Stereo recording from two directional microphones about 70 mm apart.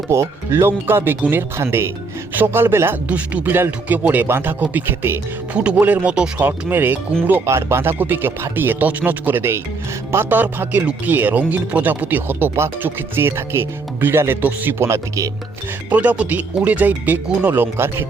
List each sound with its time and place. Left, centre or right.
0.1 s speech: right
3.1 s speech: right
5.5 s speech: centre
7.4 s speech: right
15.9 s speech: right
17.5 s speech: right